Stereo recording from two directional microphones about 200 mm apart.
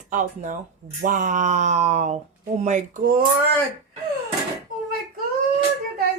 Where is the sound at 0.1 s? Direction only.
40° right (ahead or behind).